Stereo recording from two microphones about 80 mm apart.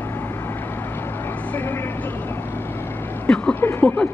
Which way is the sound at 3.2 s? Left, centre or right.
Centre.